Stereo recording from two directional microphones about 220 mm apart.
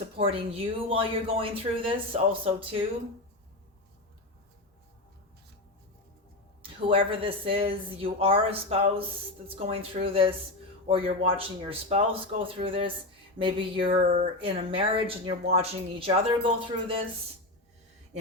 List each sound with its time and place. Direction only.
0.2 s speech: 25° right (ahead or behind)
6.6 s speech: 25° right (ahead or behind)